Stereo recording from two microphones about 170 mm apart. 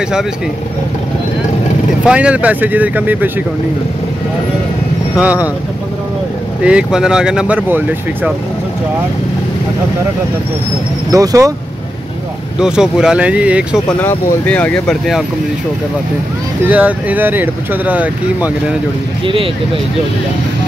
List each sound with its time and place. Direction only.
2.0 s speech: 5° right (ahead or behind)
5.1 s speech: 10° right (ahead or behind)
6.6 s speech: 5° right (ahead or behind)
11.1 s speech: 20° right (ahead or behind)
12.5 s speech: 5° right (ahead or behind)
13.7 s speech: 10° left (ahead or behind)
16.6 s speech: 10° right (ahead or behind)
19.2 s speech: 30° right (ahead or behind)